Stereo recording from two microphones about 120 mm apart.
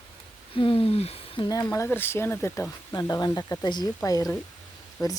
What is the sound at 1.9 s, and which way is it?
Speech, 20° left (ahead or behind).